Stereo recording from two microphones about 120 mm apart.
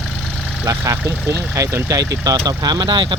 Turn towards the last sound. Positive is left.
turn(degrees=-40)  # may be behind; listen again after turning